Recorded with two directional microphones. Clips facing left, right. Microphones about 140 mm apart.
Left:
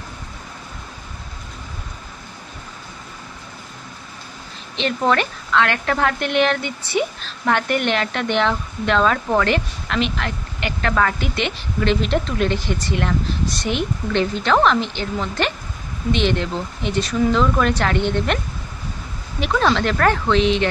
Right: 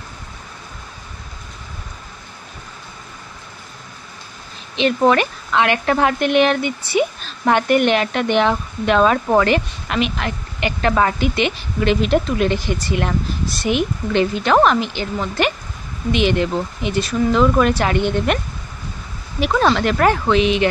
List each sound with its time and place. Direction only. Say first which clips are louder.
4.7 s a woman's voice: right 4 dB; 15° right (ahead or behind)
19.4 s a woman's voice: right 2 dB; 10° right (ahead or behind)